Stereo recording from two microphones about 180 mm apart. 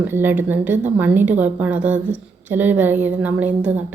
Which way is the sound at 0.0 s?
10° right (ahead or behind).